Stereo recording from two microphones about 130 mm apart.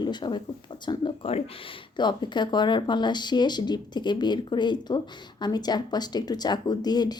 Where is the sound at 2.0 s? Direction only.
35° left (ahead or behind).